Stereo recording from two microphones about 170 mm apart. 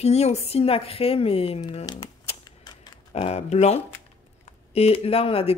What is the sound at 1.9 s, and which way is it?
Typewriter, 30° left (ahead or behind).